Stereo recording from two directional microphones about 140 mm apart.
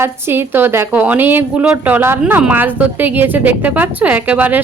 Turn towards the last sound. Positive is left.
turn(degrees=-10)  # may be behind; listen again after turning